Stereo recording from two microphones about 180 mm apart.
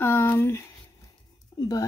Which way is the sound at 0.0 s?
10° left (ahead or behind).